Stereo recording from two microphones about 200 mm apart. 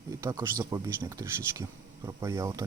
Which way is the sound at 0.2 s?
15° right (ahead or behind).